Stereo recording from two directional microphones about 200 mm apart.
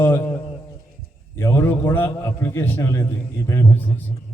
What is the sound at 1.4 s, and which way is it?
A man's voice, 15° left (ahead or behind).